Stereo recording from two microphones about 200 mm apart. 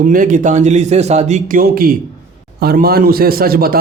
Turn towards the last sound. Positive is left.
turn(degrees=-50)  # may be behind; listen again after turning